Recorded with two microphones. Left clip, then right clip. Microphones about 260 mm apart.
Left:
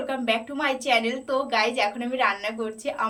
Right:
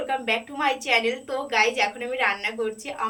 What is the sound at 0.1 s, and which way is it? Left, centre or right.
A woman's voice, centre.